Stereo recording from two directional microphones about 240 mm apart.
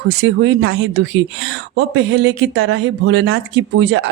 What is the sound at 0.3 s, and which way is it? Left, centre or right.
A woman's voice, right.